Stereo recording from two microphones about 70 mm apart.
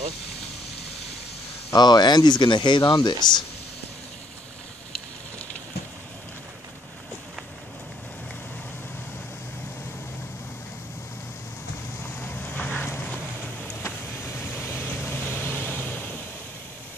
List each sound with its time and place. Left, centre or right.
1.8 s speech: left
12.2 s vehicle: left